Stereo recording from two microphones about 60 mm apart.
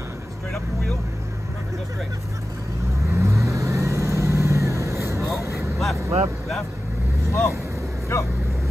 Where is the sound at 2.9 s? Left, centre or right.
Right.